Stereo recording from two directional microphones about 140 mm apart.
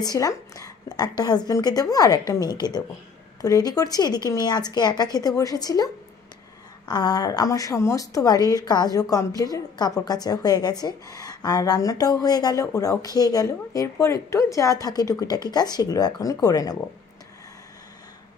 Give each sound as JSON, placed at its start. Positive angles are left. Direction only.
{"t": 0.0, "sound": "a woman's voice", "side_deg": 25}
{"t": 6.9, "sound": "a woman's voice", "side_deg": 30}